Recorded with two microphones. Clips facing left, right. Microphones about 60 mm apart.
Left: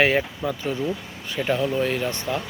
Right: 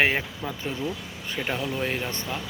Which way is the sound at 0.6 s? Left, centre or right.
Left.